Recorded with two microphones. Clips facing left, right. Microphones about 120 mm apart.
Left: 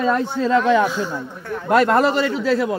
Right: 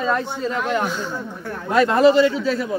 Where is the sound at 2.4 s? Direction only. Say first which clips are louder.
Left 3 dB; 90° left.